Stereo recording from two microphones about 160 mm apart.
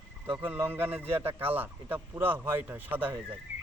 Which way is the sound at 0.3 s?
10° right (ahead or behind).